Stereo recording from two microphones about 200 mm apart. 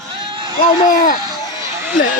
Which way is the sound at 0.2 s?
25° right (ahead or behind).